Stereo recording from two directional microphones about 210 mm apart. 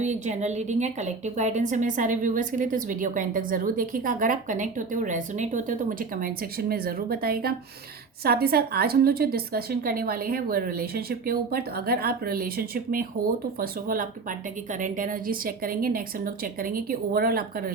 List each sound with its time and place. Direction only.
0.0 s a woman's voice: 35° right (ahead or behind)